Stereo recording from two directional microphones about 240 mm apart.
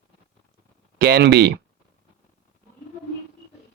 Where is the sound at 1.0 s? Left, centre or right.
Right.